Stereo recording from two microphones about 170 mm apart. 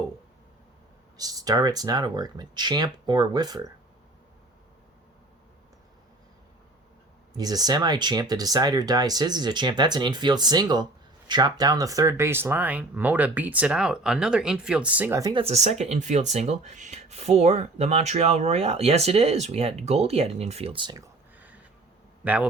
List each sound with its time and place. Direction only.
1.1 s speech: 20° right (ahead or behind)
7.3 s speech: 20° right (ahead or behind)
15.3 s speech: 35° right (ahead or behind)
21.3 s a sound: 10° right (ahead or behind)
22.2 s a man's voice: 10° right (ahead or behind)